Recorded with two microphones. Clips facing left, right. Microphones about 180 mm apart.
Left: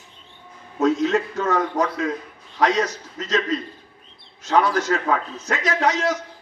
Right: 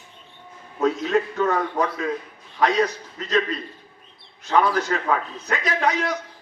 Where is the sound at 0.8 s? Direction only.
85° left.